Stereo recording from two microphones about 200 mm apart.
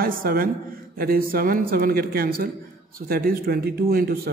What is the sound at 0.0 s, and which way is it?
A man's voice, 50° right (ahead or behind).